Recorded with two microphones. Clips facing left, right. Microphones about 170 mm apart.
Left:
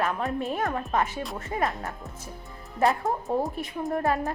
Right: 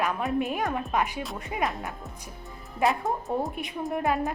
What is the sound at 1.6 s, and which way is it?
Speech, centre (ahead or behind).